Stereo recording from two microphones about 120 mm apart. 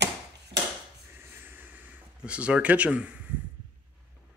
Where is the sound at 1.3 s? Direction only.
15° right (ahead or behind).